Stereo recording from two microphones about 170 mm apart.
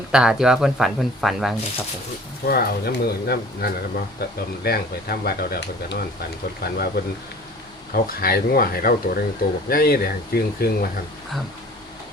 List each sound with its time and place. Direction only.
0.1 s speech: 5° right (ahead or behind)
2.5 s speech: 65° left (ahead or behind)